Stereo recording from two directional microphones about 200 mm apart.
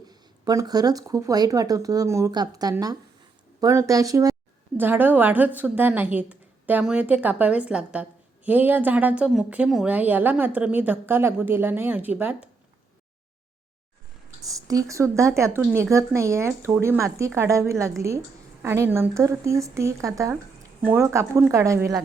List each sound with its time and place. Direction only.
0.1 s a woman's voice: 20° right (ahead or behind)
14.4 s a woman's voice: 15° right (ahead or behind)